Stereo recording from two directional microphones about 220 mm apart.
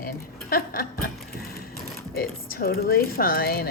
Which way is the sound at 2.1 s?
45° left (ahead or behind).